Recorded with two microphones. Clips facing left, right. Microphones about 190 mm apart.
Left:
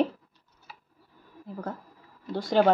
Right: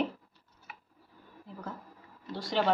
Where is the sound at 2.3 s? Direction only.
50° left (ahead or behind).